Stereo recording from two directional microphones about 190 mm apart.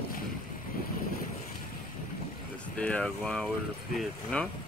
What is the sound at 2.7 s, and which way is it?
Speech, 5° left (ahead or behind).